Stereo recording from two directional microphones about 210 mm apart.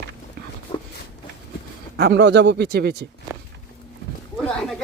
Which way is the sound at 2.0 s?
55° right (ahead or behind).